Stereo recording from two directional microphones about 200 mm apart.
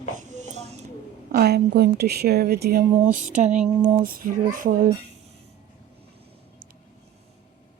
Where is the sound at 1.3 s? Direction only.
55° right (ahead or behind).